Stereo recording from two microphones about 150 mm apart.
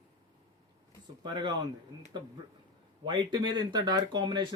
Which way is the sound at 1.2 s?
30° right (ahead or behind).